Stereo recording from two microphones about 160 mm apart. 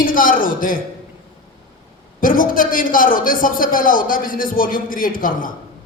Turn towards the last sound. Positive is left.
turn(degrees=60)  # may be behind; listen again after turning